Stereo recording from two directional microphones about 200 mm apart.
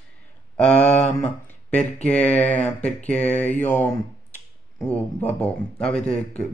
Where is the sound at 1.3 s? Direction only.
5° left (ahead or behind).